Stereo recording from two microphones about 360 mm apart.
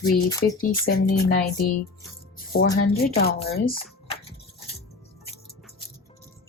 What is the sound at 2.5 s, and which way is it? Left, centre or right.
A woman's voice, left.